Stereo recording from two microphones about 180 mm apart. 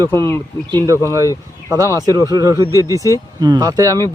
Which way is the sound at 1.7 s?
20° right (ahead or behind).